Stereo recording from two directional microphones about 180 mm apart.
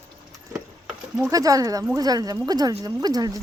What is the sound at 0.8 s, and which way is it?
Speech, 10° right (ahead or behind).